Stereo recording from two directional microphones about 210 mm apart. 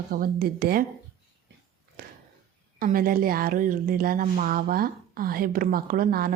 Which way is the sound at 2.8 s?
45° right (ahead or behind).